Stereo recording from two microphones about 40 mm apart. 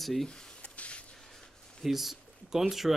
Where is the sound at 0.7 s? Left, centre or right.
Left.